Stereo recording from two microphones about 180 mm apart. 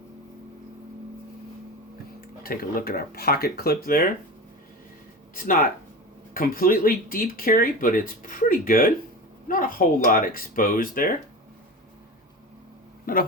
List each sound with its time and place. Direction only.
2.4 s speech: 55° left (ahead or behind)
6.3 s speech: 50° left (ahead or behind)
13.1 s speech: 55° left (ahead or behind)